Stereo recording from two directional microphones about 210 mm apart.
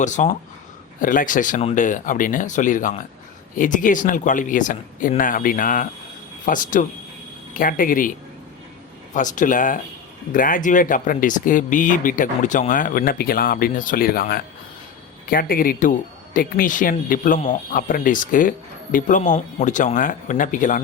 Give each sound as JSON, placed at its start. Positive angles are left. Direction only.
{"t": 0.0, "sound": "speech", "side_deg": 35}
{"t": 9.1, "sound": "speech", "side_deg": 35}